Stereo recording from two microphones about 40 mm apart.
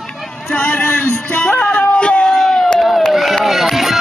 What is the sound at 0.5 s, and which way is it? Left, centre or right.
A man's voice, left.